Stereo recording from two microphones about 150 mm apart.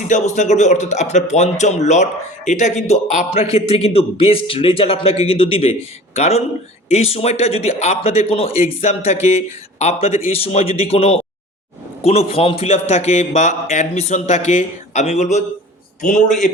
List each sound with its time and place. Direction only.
0.1 s a man's voice: 50° left (ahead or behind)